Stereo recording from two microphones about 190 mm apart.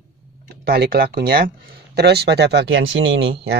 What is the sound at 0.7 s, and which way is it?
Speech, 55° right (ahead or behind).